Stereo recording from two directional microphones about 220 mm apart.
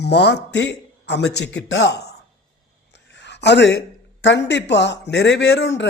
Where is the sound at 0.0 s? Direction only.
50° left (ahead or behind).